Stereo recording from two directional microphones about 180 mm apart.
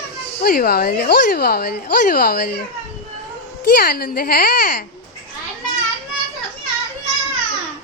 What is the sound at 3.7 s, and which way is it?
Speech, 55° left (ahead or behind).